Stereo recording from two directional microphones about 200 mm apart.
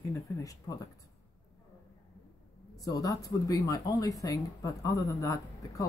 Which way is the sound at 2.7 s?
15° left (ahead or behind).